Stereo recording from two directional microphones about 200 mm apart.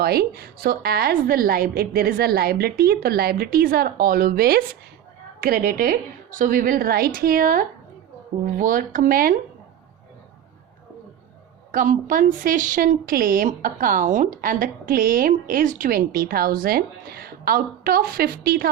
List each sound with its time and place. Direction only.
0.0 s a woman's voice: 50° right (ahead or behind)
11.7 s a woman's voice: 40° right (ahead or behind)